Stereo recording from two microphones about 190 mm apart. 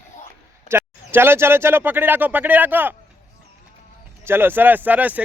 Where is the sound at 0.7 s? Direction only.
10° right (ahead or behind).